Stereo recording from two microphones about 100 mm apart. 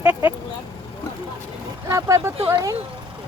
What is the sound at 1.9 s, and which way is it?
Vehicle, 30° right (ahead or behind).